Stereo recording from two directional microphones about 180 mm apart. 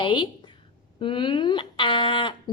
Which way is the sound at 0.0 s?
25° left (ahead or behind).